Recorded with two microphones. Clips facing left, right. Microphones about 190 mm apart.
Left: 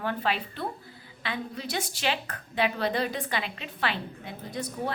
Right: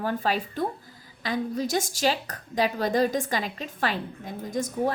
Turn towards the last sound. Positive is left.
turn(degrees=-45)  # may be behind; listen again after turning